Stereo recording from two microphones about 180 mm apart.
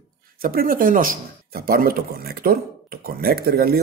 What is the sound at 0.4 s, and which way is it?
Speech, 55° right (ahead or behind).